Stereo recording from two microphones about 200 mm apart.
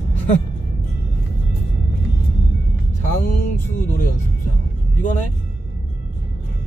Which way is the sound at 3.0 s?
40° left (ahead or behind).